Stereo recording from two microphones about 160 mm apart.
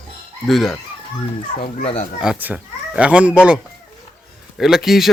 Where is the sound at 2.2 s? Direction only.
5° right (ahead or behind).